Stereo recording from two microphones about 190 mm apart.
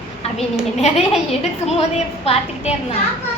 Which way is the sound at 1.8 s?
30° left (ahead or behind).